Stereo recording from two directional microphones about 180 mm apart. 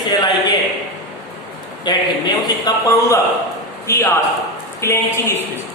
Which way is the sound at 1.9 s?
25° left (ahead or behind).